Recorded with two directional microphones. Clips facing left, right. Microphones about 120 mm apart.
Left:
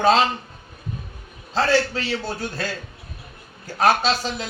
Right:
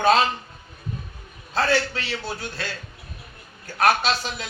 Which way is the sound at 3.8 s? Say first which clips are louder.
Left 2 dB; 35° left (ahead or behind).